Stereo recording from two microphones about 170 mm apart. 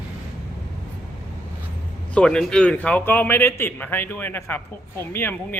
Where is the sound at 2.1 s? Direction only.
5° left (ahead or behind).